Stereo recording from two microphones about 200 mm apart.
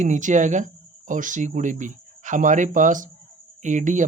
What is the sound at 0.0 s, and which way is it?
Speech, 40° right (ahead or behind).